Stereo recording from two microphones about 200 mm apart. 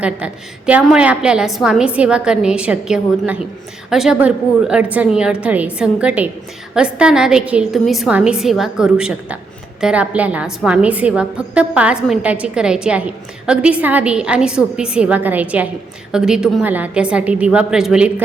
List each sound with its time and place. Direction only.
0.0 s a woman's voice: 5° right (ahead or behind)